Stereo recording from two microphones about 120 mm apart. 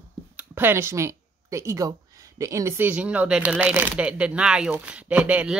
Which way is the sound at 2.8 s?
10° right (ahead or behind).